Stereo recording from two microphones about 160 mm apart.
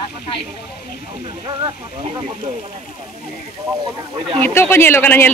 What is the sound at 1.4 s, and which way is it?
Speech, 30° right (ahead or behind).